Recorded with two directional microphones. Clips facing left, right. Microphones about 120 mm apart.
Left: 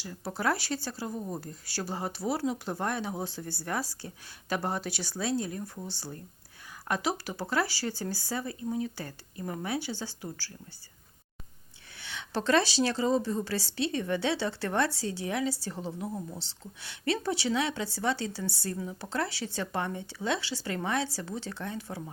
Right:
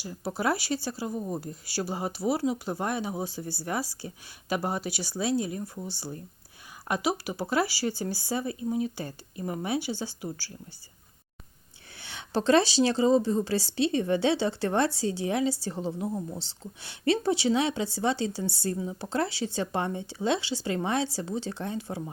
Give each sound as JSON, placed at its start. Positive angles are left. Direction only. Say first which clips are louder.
{"t": 0.3, "sound": "speech", "louder": "right 2 dB", "side_deg": -10}
{"t": 11.9, "sound": "a woman's voice", "louder": "right 4 dB", "side_deg": -30}
{"t": 16.0, "sound": "speech", "louder": "right 4 dB", "side_deg": -10}
{"t": 16.4, "sound": "a woman's voice", "louder": "right 3 dB", "side_deg": -30}